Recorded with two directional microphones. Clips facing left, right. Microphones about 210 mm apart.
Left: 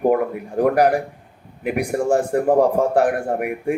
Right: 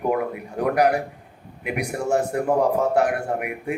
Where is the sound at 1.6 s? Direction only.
35° left (ahead or behind).